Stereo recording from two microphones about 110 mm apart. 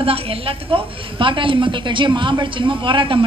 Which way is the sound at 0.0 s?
60° right (ahead or behind).